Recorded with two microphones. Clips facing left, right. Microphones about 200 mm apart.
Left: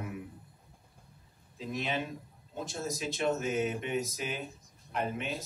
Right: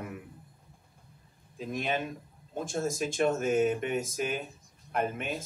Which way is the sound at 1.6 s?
50° right (ahead or behind).